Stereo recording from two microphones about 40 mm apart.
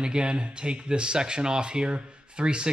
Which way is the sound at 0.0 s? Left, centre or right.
Right.